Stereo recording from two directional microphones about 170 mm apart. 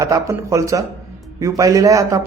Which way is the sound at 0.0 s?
20° right (ahead or behind).